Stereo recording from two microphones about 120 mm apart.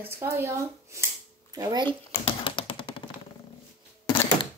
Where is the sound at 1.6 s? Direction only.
35° right (ahead or behind).